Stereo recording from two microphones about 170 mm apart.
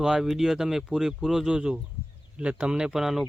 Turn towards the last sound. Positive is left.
turn(degrees=0)  # may be behind; listen again after turning